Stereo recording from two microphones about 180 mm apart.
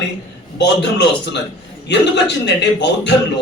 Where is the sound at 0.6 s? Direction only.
75° left (ahead or behind).